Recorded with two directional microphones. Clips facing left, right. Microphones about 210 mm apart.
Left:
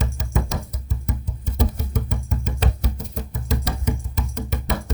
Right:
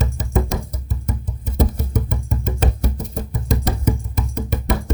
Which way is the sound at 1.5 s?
50° right (ahead or behind).